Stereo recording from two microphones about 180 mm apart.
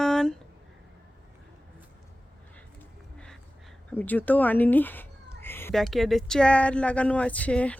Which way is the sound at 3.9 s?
10° left (ahead or behind).